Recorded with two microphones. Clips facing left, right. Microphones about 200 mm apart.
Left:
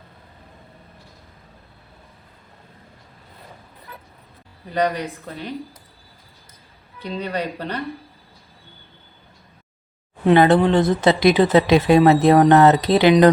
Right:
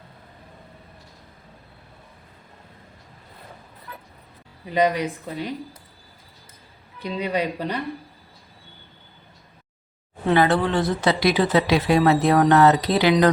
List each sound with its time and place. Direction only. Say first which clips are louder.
4.7 s speech: right 1 dB; 15° right (ahead or behind)
7.2 s speech: right 2 dB; 10° right (ahead or behind)
10.2 s speech: left 5 dB; 20° left (ahead or behind)